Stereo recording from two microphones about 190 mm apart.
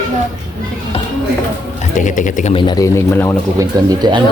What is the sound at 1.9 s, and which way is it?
Speech, 40° left (ahead or behind).